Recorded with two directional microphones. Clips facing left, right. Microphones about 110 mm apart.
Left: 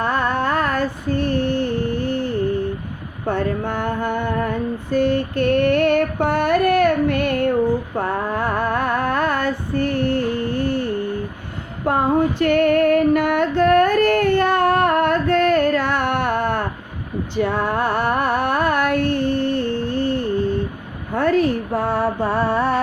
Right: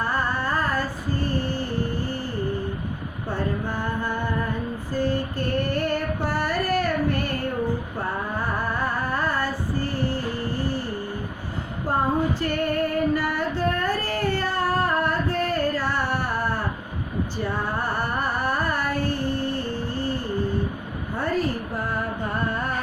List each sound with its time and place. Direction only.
0.0 s female singing: 70° left (ahead or behind)
7.9 s music: 70° left (ahead or behind)
11.9 s female singing: 70° left (ahead or behind)
17.3 s a sound: 70° left (ahead or behind); by 22.8 s 90° left